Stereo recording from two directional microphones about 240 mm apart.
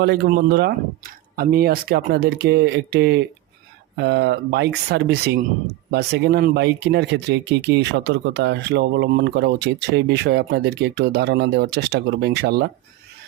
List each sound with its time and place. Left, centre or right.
0.0 s speech: right